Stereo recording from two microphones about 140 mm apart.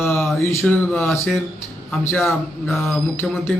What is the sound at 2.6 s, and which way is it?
Speech, centre (ahead or behind).